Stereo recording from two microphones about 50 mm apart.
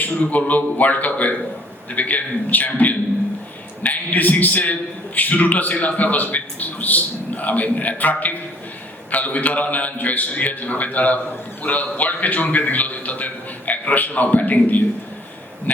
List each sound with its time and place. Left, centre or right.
0.0 s a man's voice: left